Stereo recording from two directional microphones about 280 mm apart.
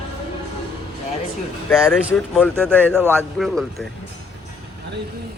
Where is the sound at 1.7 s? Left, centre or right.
Centre.